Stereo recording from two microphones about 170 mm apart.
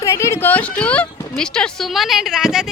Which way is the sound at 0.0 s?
15° left (ahead or behind).